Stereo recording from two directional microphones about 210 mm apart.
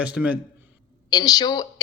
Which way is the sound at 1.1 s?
20° left (ahead or behind).